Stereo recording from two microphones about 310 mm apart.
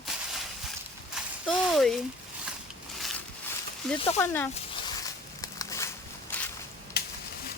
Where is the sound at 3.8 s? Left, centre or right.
Centre.